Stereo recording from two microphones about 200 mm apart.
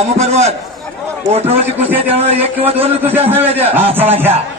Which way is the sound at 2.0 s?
30° right (ahead or behind).